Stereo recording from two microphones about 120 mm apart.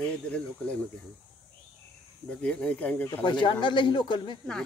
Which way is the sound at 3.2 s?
40° left (ahead or behind).